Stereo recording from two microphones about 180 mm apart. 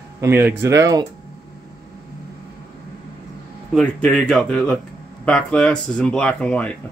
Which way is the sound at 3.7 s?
5° left (ahead or behind).